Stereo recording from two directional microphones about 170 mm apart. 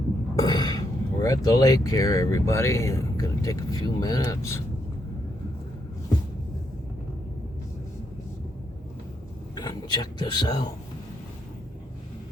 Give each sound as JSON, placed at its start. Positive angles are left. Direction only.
{"t": 0.4, "sound": "speech", "side_deg": 25}
{"t": 9.6, "sound": "speech", "side_deg": 25}